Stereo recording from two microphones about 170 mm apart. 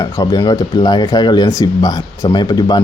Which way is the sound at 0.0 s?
25° left (ahead or behind).